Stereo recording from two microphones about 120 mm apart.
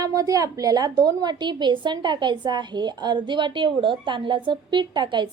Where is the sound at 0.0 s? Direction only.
30° right (ahead or behind).